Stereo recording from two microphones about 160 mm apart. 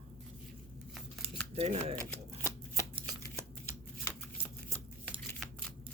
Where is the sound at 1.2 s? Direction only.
40° right (ahead or behind).